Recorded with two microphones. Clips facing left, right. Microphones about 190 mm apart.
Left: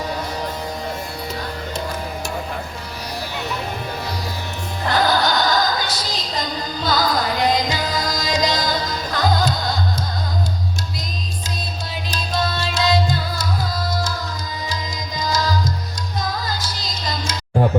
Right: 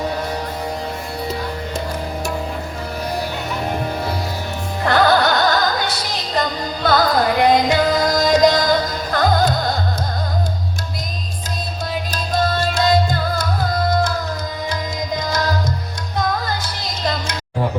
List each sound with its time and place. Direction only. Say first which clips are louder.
4.9 s music: right 4 dB; 60° right (ahead or behind)
12.1 s music: right 3 dB; 45° right (ahead or behind)
15.1 s music: even; 60° right (ahead or behind)